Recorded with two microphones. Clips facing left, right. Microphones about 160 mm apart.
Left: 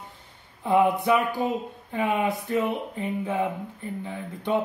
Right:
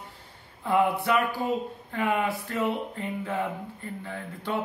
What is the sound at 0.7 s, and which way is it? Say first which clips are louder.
Speech: left 3 dB; 15° left (ahead or behind).